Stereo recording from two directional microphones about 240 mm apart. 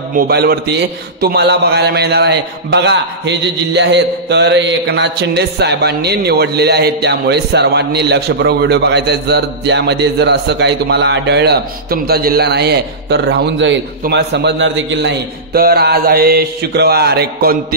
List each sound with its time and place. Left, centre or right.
0.1 s a man's voice: right